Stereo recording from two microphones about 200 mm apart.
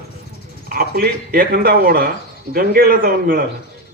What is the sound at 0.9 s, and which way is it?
A man's voice, 45° right (ahead or behind).